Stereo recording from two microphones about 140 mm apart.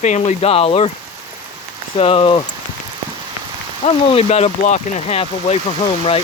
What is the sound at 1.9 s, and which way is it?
Speech, 40° left (ahead or behind).